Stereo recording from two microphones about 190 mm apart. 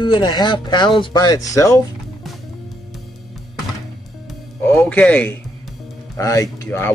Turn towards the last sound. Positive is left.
turn(degrees=15)  # may be behind; listen again after turning